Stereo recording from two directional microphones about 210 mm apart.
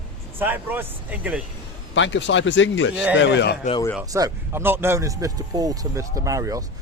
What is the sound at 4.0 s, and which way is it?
Speech, 15° right (ahead or behind).